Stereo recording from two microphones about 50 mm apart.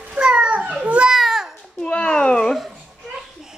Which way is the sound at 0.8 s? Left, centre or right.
Right.